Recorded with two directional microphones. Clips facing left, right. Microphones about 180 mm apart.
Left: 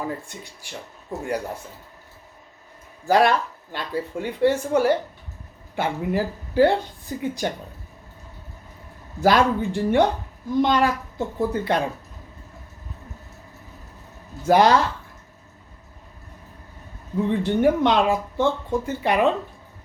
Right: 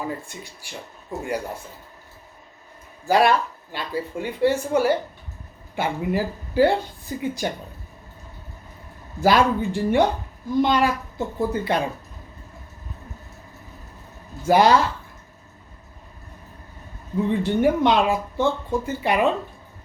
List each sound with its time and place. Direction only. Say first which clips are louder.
0.3 s speech: right 1 dB; 5° right (ahead or behind)
3.1 s speech: even; 5° right (ahead or behind)
9.2 s speech: even; 5° right (ahead or behind)
14.4 s speech: even; 5° right (ahead or behind)
17.2 s speech: left 1 dB; 10° right (ahead or behind)